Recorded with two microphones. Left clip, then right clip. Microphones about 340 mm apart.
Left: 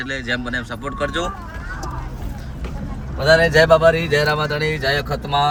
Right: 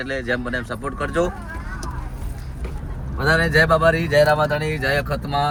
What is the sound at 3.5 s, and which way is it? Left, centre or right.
Speech, left.